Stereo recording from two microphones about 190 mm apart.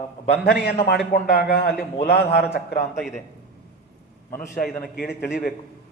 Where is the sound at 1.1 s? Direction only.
55° left (ahead or behind).